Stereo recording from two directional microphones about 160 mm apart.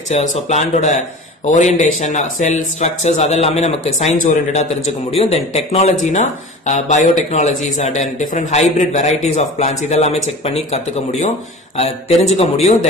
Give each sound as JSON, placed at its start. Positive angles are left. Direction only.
{"t": 0.1, "sound": "speech", "side_deg": 45}